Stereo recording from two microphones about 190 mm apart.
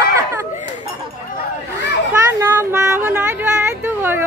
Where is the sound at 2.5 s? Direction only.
15° right (ahead or behind).